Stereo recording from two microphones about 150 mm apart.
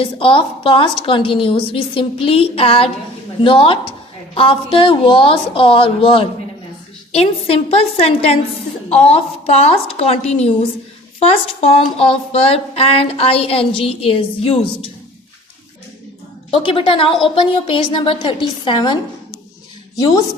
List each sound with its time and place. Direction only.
0.0 s a woman's voice: 35° left (ahead or behind)
16.5 s speech: 35° left (ahead or behind)